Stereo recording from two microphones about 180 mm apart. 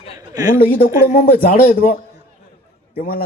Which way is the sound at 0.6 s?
50° left (ahead or behind).